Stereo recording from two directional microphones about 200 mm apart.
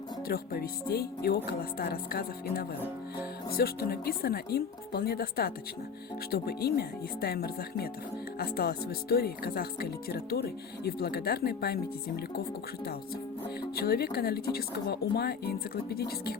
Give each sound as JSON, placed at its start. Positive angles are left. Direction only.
{"t": 0.3, "sound": "speech", "side_deg": 45}
{"t": 13.7, "sound": "speech", "side_deg": 50}